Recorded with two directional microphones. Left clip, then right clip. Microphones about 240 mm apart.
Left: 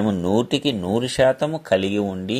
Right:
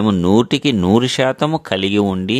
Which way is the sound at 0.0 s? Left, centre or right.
Right.